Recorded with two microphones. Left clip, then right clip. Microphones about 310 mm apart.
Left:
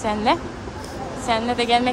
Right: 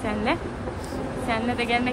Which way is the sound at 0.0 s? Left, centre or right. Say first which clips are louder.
Left 5 dB; centre.